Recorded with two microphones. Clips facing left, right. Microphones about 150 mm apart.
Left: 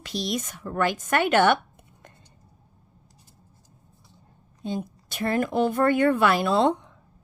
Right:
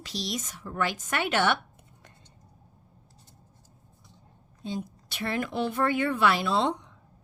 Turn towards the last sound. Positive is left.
turn(degrees=50)  # may be behind; listen again after turning